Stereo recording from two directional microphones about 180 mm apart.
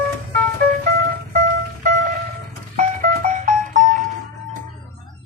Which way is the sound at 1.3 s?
50° right (ahead or behind).